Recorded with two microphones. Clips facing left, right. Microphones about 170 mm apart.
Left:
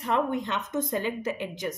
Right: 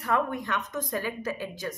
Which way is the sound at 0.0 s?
25° left (ahead or behind).